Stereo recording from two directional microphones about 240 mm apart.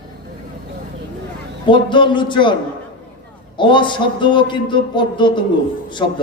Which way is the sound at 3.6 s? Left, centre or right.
Centre.